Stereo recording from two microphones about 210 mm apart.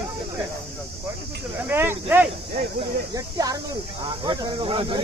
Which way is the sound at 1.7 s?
10° right (ahead or behind).